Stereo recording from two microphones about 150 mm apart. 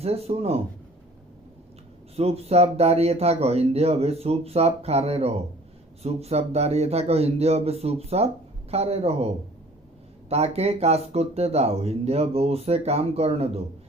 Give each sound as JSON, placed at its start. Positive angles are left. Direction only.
{"t": 0.0, "sound": "speech", "side_deg": -45}
{"t": 2.1, "sound": "speech", "side_deg": -45}